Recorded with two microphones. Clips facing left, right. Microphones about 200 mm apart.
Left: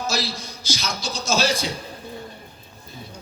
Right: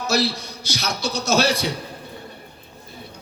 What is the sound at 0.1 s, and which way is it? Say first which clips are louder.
A man's voice: right 6 dB; 65° right (ahead or behind).